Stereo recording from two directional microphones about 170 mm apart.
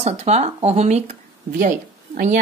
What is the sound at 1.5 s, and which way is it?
Speech, 50° right (ahead or behind).